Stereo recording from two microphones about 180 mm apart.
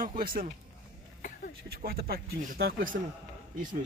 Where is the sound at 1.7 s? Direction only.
55° right (ahead or behind).